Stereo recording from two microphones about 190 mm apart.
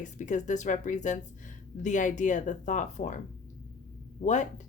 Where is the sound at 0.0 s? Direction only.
40° left (ahead or behind).